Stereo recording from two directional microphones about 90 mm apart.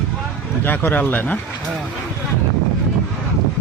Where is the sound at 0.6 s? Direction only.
20° left (ahead or behind).